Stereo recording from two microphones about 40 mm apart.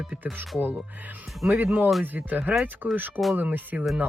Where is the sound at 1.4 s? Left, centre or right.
Right.